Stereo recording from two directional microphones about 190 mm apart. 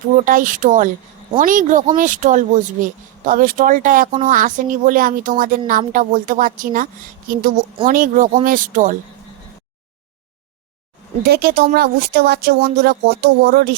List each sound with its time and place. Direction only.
0.2 s speech: 45° right (ahead or behind)
11.3 s speech: 55° right (ahead or behind)